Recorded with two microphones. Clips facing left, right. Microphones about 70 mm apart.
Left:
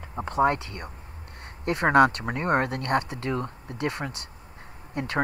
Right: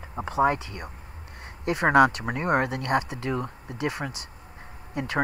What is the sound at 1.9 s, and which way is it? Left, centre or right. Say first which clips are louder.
Speech: even; left.